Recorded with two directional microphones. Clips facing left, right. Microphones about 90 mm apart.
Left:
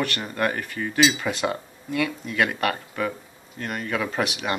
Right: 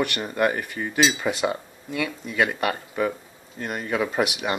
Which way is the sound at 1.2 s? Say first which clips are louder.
Right 1 dB; 5° right (ahead or behind).